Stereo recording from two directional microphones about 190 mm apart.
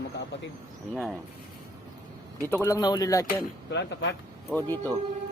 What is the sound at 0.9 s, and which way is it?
Speech, centre (ahead or behind).